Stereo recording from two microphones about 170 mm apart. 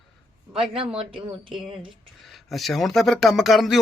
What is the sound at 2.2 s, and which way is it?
Speech, centre (ahead or behind).